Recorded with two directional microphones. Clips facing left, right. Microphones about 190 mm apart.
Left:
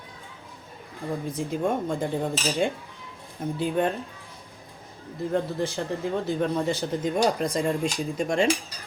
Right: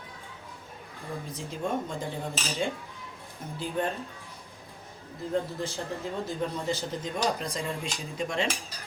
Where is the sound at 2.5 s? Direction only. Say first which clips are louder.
Left 5 dB; 55° left (ahead or behind).